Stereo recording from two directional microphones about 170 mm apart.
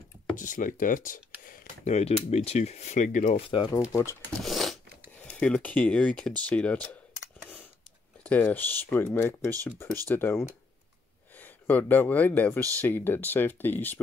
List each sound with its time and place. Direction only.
0.4 s speech: 50° left (ahead or behind)
1.4 s a sound: 55° left (ahead or behind)
2.0 s speech: 40° left (ahead or behind)
3.3 s speech: 30° left (ahead or behind)
4.4 s a sound: centre (ahead or behind)
5.4 s speech: 10° left (ahead or behind)
8.2 s speech: 10° left (ahead or behind)